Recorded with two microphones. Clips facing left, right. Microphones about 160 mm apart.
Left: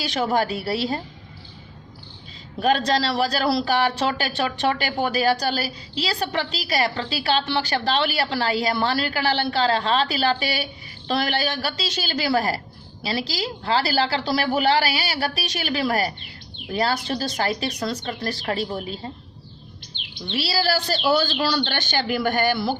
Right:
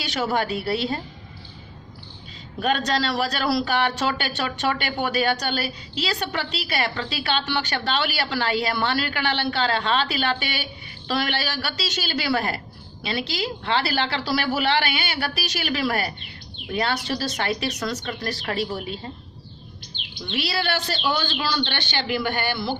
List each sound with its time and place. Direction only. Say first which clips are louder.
0.0 s speech: left 2 dB; 30° left (ahead or behind)
2.6 s speech: left 3 dB; 35° left (ahead or behind)
20.2 s speech: left 2 dB; 30° left (ahead or behind)